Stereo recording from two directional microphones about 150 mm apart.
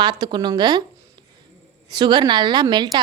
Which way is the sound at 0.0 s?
30° right (ahead or behind).